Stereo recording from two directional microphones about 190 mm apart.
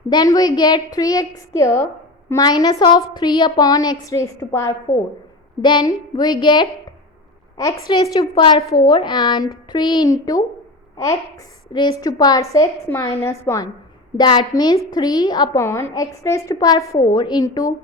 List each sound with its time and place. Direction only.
0.1 s a woman's voice: 20° left (ahead or behind)